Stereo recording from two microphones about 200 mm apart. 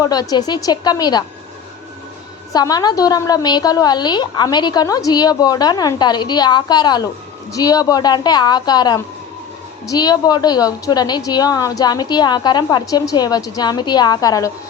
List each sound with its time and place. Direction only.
0.0 s a woman's voice: 20° left (ahead or behind)
2.5 s a woman's voice: 20° left (ahead or behind)